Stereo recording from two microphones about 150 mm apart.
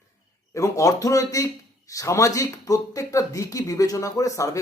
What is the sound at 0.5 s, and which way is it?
Speech, 20° left (ahead or behind).